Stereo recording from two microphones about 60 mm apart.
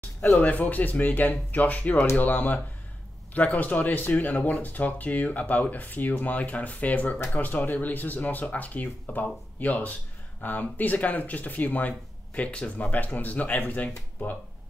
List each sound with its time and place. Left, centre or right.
0.4 s speech: left